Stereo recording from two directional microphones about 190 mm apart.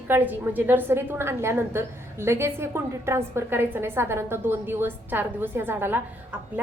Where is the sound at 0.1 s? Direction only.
10° right (ahead or behind).